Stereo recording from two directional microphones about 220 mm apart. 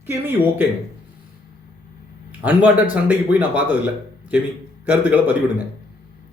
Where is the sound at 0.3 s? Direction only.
10° right (ahead or behind).